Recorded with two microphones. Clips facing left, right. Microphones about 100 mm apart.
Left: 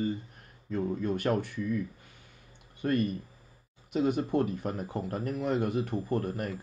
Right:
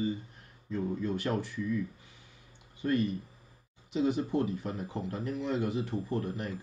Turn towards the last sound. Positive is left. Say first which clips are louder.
# left 3 dB
turn(degrees=50)  # may be behind; listen again after turning